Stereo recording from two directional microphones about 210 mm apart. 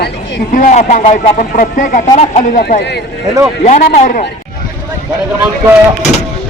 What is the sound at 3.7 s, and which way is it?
Speech, 35° left (ahead or behind).